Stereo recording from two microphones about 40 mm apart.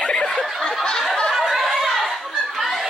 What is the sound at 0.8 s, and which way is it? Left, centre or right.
Snicker, centre.